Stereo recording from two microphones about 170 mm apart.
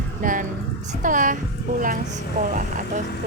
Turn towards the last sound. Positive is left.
turn(degrees=-50)  # may be behind; listen again after turning